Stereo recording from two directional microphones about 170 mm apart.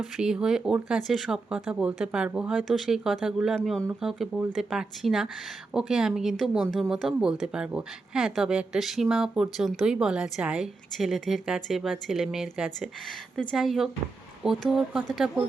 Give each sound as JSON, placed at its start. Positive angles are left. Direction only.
{"t": 0.0, "sound": "speech", "side_deg": -5}